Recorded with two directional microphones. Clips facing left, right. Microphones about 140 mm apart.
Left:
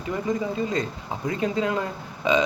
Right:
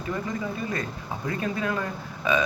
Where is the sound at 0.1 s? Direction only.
20° left (ahead or behind).